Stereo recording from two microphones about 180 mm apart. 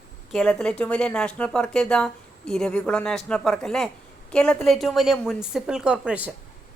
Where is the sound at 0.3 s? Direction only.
5° left (ahead or behind).